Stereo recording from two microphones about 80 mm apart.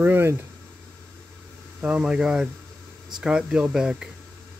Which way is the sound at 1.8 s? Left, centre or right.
Centre.